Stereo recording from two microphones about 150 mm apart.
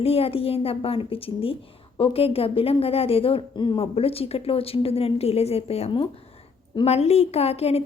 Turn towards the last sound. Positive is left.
turn(degrees=45)  # may be behind; listen again after turning